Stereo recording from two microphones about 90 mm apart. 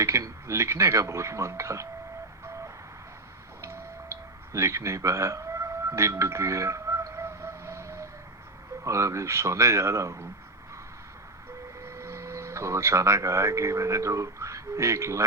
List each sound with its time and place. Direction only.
0.0 s speech: 30° right (ahead or behind)
3.6 s music: 30° right (ahead or behind)
8.8 s speech: 35° right (ahead or behind)
11.9 s speech: 30° right (ahead or behind)